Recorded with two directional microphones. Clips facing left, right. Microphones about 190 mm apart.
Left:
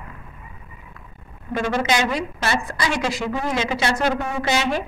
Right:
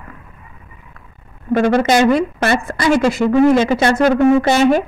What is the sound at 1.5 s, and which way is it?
A woman's voice, 60° right (ahead or behind).